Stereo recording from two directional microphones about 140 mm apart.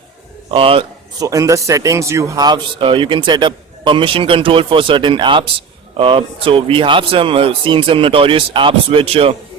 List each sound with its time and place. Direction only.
0.5 s speech: 40° right (ahead or behind)
1.2 s speech: 25° right (ahead or behind); by 9.3 s 40° right (ahead or behind)